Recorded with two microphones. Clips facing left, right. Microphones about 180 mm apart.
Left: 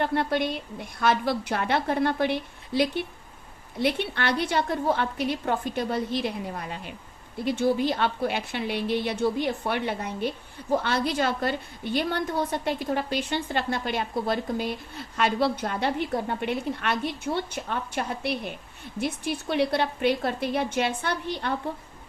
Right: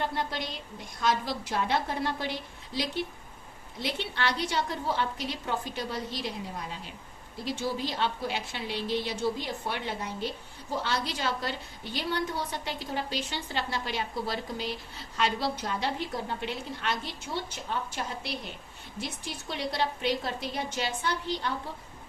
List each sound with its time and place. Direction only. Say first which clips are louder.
0.0 s a woman's voice: left 7 dB; 60° left (ahead or behind)